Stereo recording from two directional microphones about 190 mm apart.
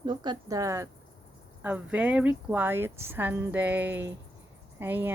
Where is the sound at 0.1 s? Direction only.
20° right (ahead or behind).